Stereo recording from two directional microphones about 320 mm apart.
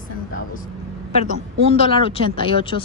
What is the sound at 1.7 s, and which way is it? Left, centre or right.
A woman's voice, centre.